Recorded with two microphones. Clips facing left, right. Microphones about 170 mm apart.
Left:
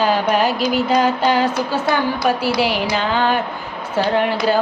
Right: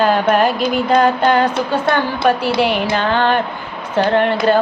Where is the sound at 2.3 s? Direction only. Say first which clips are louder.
Right 4 dB; 10° left (ahead or behind).